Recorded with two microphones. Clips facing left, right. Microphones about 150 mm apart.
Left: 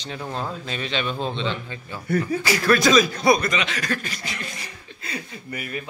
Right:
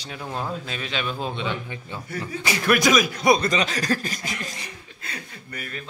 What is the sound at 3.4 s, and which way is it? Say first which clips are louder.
Speech: right 2 dB; 35° right (ahead or behind).